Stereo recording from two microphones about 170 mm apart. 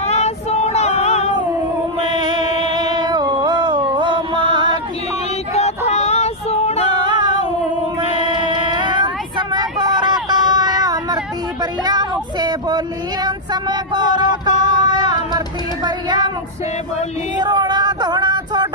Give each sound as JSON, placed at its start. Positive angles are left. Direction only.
{"t": 0.0, "sound": "child singing", "side_deg": 40}
{"t": 2.0, "sound": "music", "side_deg": -25}
{"t": 5.5, "sound": "child singing", "side_deg": 40}
{"t": 6.9, "sound": "female singing", "side_deg": -25}
{"t": 8.2, "sound": "a sound", "side_deg": -25}
{"t": 11.8, "sound": "child singing", "side_deg": -25}
{"t": 17.4, "sound": "a sound", "side_deg": -25}